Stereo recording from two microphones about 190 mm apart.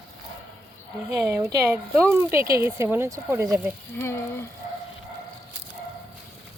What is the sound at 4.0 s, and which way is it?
Frying, 10° left (ahead or behind).